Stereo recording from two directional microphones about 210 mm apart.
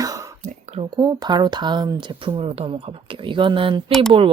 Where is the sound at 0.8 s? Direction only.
20° right (ahead or behind).